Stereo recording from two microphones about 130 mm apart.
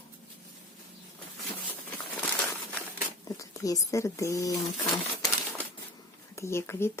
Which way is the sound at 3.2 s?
25° left (ahead or behind).